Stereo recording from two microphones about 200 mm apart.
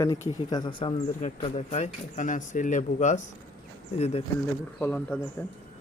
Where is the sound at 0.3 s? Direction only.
20° left (ahead or behind).